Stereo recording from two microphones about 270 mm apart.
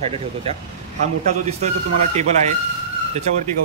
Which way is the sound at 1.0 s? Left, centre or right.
Right.